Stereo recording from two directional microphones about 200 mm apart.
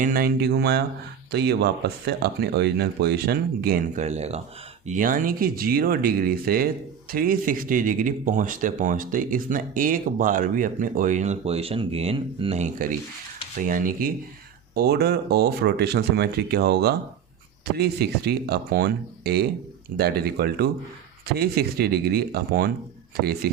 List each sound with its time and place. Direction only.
0.0 s speech: 45° right (ahead or behind)